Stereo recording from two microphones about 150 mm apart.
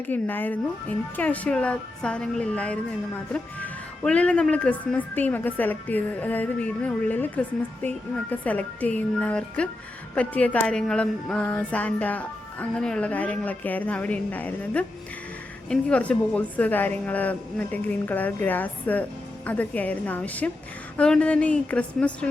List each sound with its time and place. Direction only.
0.1 s speech: 10° left (ahead or behind)